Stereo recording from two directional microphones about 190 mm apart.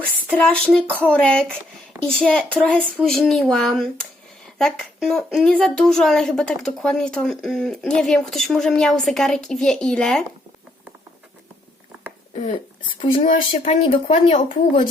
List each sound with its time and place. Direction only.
0.3 s a woman's voice: 5° left (ahead or behind)
12.3 s speech: 30° left (ahead or behind)
13.2 s speech: 45° left (ahead or behind)
13.7 s speech: 30° left (ahead or behind)
14.1 s speech: 40° left (ahead or behind)